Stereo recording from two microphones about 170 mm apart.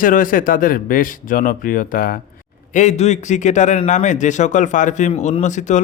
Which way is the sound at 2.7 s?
40° left (ahead or behind).